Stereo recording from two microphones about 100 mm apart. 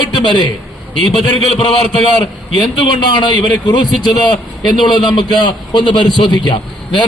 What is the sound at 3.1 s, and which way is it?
A man's voice, 50° left (ahead or behind).